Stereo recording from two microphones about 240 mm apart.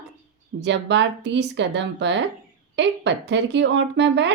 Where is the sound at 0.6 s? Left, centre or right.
Right.